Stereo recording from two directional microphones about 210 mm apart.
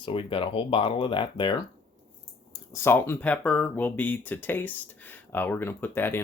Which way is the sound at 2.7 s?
10° left (ahead or behind).